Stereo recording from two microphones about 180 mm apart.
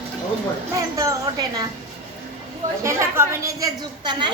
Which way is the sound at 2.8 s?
15° right (ahead or behind).